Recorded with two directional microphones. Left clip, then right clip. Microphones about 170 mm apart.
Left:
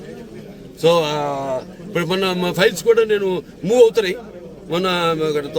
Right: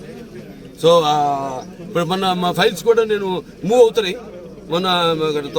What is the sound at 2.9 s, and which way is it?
Speech, 35° left (ahead or behind).